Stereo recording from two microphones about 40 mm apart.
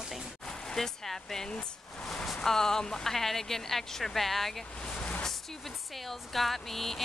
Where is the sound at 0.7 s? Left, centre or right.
Centre.